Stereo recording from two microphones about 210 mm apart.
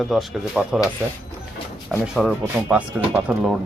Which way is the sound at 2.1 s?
5° right (ahead or behind).